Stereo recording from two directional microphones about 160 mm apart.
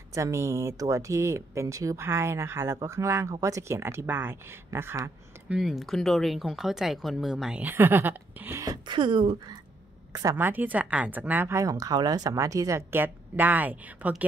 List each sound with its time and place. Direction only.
0.1 s speech: 20° right (ahead or behind)
5.6 s speech: centre (ahead or behind); by 9.4 s 35° right (ahead or behind)
10.1 s speech: 15° right (ahead or behind)